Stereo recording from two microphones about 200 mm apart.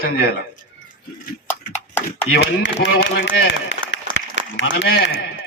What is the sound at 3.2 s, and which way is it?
A man's voice, 65° left (ahead or behind).